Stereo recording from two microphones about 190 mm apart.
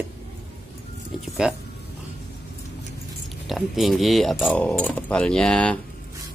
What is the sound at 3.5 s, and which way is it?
Speech, centre (ahead or behind).